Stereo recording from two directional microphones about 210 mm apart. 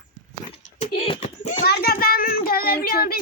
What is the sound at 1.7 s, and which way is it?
Child singing, 45° left (ahead or behind).